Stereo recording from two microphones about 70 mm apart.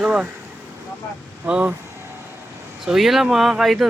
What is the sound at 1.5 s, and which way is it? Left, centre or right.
Speech, right.